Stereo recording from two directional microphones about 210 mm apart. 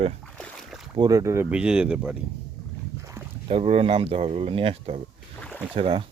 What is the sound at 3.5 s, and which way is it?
Speech, 25° right (ahead or behind).